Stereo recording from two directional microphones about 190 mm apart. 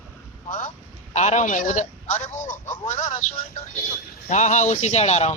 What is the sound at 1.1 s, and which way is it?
Speech, 35° left (ahead or behind).